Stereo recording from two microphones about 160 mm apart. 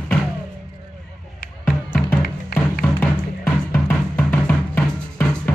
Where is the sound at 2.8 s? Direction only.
10° left (ahead or behind).